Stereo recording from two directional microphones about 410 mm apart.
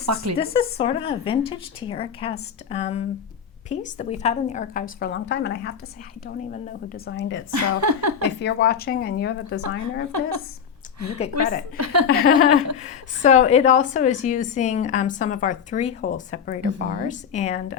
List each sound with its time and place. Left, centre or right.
0.0 s speech: right
0.3 s a woman's voice: centre
7.5 s a woman's voice: right
8.2 s a woman's voice: left
9.6 s a woman's voice: right
11.8 s speech: right
12.0 s a woman's voice: left